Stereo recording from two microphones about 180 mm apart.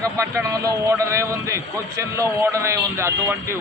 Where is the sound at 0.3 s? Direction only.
15° right (ahead or behind).